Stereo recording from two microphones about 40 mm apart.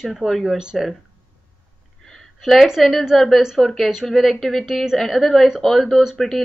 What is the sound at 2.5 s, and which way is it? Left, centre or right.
A woman's voice, centre.